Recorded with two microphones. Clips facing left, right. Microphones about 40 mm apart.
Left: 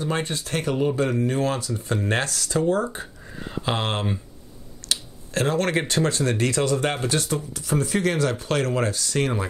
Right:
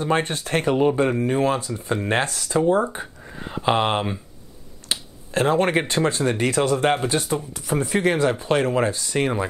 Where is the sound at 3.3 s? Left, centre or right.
Centre.